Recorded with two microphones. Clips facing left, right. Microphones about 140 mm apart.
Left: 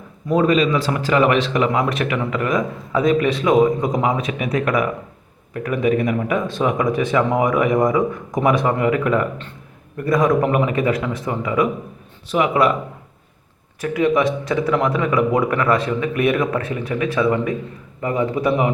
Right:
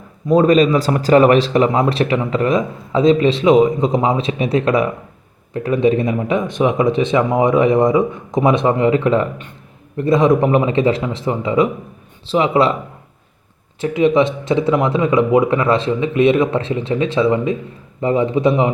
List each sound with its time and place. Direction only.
0.3 s a man's voice: 35° right (ahead or behind)
13.8 s a man's voice: 20° right (ahead or behind)